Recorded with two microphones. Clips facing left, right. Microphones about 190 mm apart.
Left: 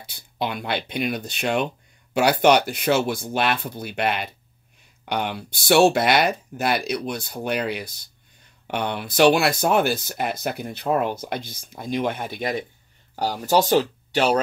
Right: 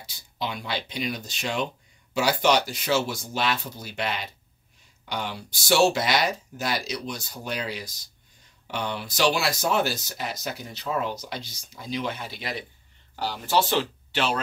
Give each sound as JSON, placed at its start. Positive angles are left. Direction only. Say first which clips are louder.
{"t": 0.0, "sound": "speech", "louder": "left 5 dB", "side_deg": 60}